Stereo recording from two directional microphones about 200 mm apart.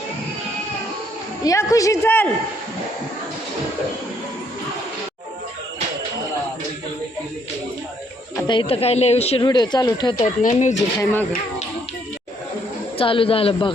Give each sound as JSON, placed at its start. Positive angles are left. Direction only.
{"t": 1.5, "sound": "a woman's voice", "side_deg": 15}
{"t": 8.4, "sound": "speech", "side_deg": 25}
{"t": 10.4, "sound": "speech", "side_deg": 40}
{"t": 11.0, "sound": "a woman's voice", "side_deg": 10}
{"t": 13.0, "sound": "speech", "side_deg": 25}